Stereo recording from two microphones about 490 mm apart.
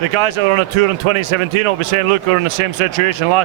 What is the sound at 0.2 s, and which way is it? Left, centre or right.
Speech, right.